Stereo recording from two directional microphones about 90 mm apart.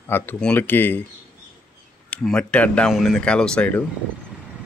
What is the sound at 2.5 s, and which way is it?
Speech, 15° left (ahead or behind).